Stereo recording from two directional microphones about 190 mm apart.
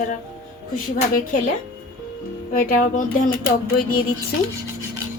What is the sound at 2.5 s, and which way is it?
Speech, 45° left (ahead or behind).